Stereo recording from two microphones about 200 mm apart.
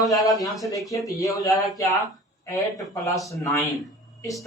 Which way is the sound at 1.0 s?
15° left (ahead or behind).